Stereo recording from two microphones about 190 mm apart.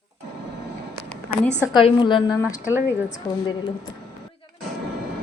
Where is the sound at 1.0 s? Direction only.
5° left (ahead or behind).